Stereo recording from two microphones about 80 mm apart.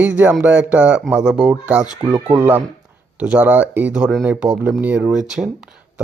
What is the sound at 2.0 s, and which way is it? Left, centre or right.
Speech, right.